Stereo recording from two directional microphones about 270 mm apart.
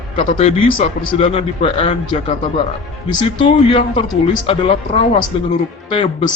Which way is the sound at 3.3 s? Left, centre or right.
Centre.